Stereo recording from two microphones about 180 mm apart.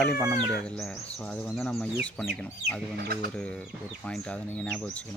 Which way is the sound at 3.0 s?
60° right (ahead or behind).